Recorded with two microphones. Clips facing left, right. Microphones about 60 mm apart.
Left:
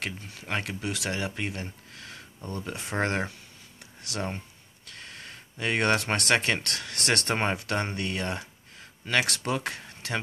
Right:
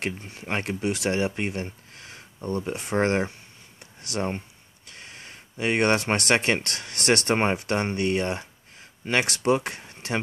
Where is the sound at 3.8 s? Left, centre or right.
Right.